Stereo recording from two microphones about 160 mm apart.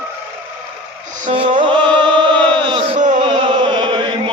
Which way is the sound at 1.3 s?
30° right (ahead or behind).